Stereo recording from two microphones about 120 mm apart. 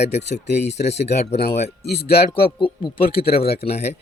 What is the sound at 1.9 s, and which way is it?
Speech, 45° left (ahead or behind).